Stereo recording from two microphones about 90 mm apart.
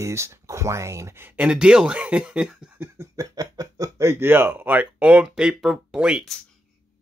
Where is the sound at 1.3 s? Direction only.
10° right (ahead or behind).